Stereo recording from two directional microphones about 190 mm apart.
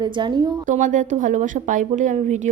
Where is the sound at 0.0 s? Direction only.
25° right (ahead or behind).